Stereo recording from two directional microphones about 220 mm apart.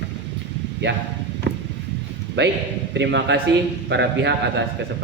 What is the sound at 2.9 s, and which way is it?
A man's voice, 50° right (ahead or behind).